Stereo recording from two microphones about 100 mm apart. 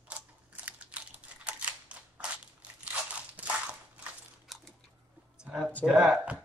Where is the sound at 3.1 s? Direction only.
15° right (ahead or behind).